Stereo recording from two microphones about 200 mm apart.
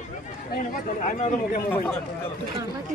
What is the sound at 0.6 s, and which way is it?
Speech, 40° left (ahead or behind).